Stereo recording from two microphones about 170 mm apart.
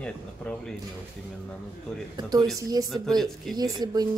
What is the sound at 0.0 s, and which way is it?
Speech, 5° left (ahead or behind).